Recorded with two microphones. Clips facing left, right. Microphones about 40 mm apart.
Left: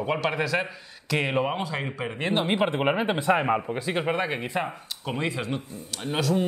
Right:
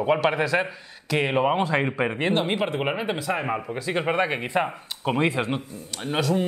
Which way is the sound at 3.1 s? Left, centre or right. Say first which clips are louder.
Left 4 dB; left.